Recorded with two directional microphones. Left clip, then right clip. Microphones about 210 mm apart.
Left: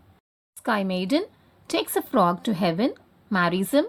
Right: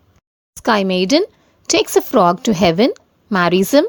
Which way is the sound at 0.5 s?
45° right (ahead or behind).